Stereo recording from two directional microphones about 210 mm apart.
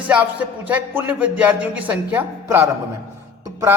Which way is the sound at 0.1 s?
5° right (ahead or behind).